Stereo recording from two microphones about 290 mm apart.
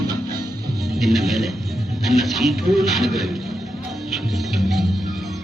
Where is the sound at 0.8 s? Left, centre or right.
Centre.